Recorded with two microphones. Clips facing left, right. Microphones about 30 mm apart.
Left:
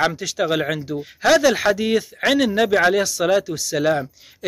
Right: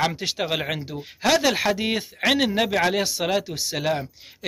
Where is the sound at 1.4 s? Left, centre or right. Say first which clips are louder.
Left 4 dB; centre.